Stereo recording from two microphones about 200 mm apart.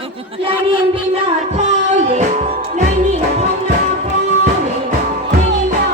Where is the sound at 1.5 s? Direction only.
35° right (ahead or behind).